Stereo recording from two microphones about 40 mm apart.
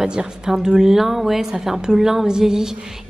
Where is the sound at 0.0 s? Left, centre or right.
Centre.